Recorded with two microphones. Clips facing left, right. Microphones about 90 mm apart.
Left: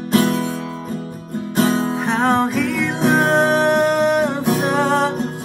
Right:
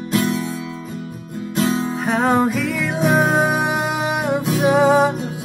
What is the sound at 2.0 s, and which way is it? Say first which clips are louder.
Music: right 2 dB; centre (ahead or behind).